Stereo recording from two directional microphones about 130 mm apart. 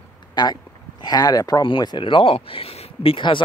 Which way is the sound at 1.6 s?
40° left (ahead or behind).